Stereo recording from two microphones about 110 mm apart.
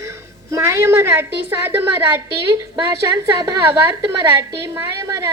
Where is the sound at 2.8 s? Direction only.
40° right (ahead or behind).